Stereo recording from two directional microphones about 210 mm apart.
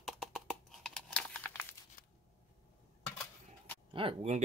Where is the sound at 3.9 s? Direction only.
30° right (ahead or behind).